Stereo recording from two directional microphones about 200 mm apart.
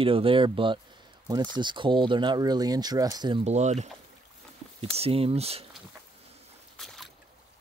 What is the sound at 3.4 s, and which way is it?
Speech, 35° right (ahead or behind).